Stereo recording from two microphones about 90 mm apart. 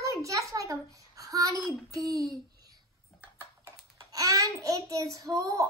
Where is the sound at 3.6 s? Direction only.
40° right (ahead or behind).